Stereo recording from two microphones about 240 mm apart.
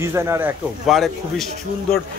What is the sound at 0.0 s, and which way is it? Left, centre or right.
Speech, centre.